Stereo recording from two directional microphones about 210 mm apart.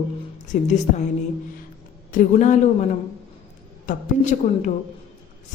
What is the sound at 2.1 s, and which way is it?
Speech, 35° left (ahead or behind).